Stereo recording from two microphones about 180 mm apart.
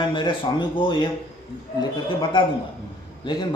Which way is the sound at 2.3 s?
25° left (ahead or behind).